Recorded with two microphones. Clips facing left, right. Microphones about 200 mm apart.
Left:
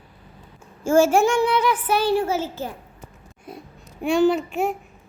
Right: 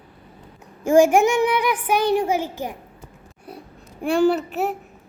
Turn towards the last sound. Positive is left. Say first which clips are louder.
# even
turn(degrees=-5)  # may be behind; listen again after turning